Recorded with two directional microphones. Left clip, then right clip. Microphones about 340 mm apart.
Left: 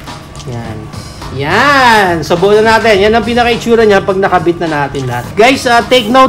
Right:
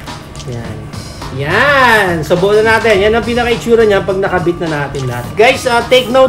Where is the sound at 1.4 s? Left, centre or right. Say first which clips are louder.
Left 2 dB; left.